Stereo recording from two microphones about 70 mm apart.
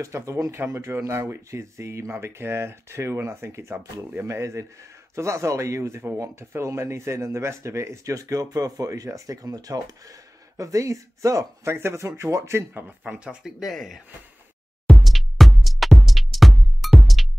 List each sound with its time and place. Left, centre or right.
0.0 s speech: right
10.6 s speech: right; by 13.5 s centre
13.6 s speech: centre
14.9 s music: centre